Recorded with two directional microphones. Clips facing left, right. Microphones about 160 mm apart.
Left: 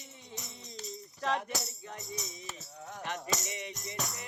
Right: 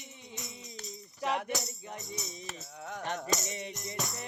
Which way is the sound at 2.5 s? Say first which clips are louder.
Right 3 dB; 80° right.